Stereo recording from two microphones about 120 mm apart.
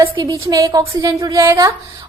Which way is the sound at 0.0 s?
30° right (ahead or behind).